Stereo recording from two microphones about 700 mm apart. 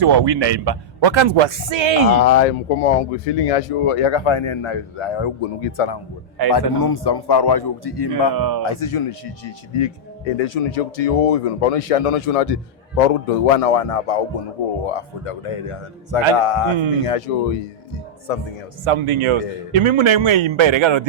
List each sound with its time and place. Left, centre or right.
0.0 s a man's voice: right
2.2 s speech: left
6.5 s a man's voice: left
18.9 s a man's voice: right